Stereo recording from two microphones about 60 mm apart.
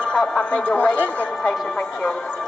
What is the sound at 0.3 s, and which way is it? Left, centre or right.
Speech, centre.